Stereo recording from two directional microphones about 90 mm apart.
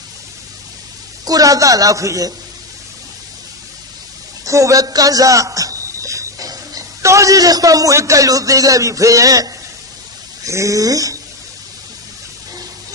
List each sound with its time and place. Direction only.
1.2 s a man's voice: 40° right (ahead or behind)
4.5 s a man's voice: 35° right (ahead or behind)